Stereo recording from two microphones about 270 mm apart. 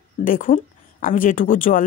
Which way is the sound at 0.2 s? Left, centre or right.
Left.